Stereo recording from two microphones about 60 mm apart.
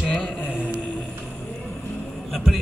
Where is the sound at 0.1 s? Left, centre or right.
Left.